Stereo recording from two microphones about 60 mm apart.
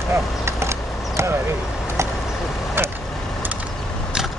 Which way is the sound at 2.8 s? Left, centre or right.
Right.